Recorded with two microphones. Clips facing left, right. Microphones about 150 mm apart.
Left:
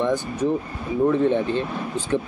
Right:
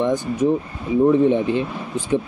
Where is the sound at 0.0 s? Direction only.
15° right (ahead or behind).